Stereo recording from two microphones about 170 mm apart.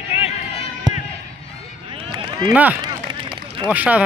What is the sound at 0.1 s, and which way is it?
Run, 35° left (ahead or behind).